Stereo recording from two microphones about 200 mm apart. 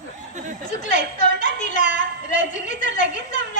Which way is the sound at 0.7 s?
35° left (ahead or behind).